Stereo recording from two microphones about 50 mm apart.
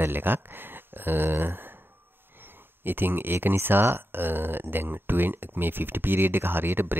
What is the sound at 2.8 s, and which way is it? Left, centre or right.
Speech, right.